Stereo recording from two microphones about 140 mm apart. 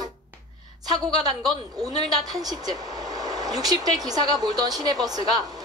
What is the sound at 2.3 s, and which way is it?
A woman's voice, 25° right (ahead or behind).